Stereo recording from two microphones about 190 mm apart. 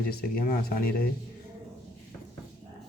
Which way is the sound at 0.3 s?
50° left (ahead or behind).